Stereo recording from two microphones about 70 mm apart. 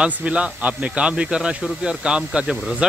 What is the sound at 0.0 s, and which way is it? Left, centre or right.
Speech, centre.